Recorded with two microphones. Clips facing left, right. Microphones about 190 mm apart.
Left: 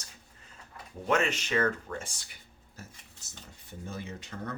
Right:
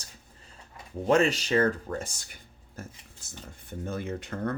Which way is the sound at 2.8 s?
50° right (ahead or behind).